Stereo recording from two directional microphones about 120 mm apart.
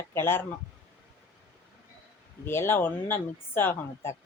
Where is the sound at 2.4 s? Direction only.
20° left (ahead or behind).